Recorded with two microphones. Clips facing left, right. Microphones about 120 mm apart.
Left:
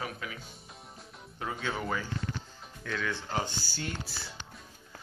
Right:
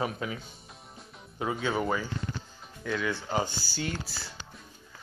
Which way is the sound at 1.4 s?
10° right (ahead or behind).